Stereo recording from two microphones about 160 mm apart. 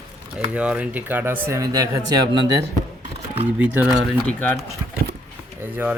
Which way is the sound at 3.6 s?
10° right (ahead or behind).